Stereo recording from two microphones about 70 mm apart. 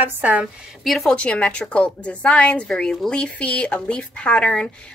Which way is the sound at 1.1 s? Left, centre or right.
Centre.